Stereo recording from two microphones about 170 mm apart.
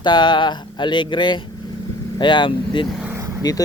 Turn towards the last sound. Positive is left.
turn(degrees=25)  # may be behind; listen again after turning